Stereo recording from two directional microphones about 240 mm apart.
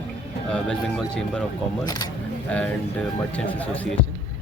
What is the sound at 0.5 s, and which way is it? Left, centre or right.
Speech, centre.